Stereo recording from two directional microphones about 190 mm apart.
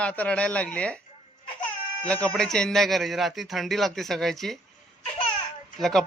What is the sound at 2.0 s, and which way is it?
A man's voice, 5° left (ahead or behind).